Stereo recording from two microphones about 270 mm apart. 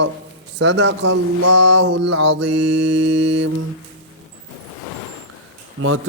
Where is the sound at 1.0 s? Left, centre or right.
Right.